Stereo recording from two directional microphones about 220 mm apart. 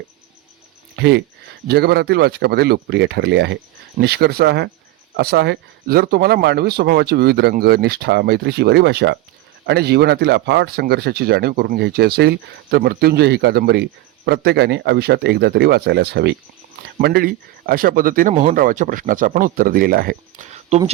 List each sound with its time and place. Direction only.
0.9 s speech: 50° right (ahead or behind); by 20.9 s 30° right (ahead or behind)